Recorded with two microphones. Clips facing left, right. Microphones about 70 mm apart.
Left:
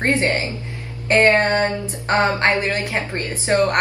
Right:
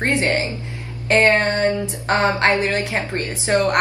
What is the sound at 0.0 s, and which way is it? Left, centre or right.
A woman's voice, left.